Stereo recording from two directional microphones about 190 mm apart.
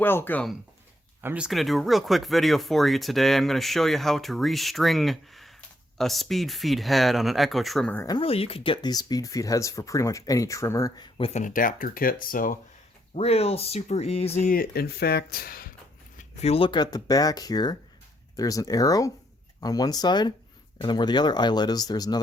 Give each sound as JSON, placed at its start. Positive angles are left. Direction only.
{"t": 0.0, "sound": "speech", "side_deg": 10}
{"t": 1.2, "sound": "speech", "side_deg": -5}
{"t": 8.0, "sound": "speech", "side_deg": 25}
{"t": 11.3, "sound": "speech", "side_deg": 45}
{"t": 13.1, "sound": "speech", "side_deg": 30}
{"t": 16.1, "sound": "speech", "side_deg": 35}